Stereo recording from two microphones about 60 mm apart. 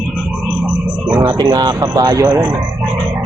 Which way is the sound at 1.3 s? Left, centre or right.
Right.